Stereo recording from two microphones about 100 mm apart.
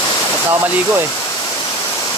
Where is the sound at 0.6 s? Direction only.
20° right (ahead or behind).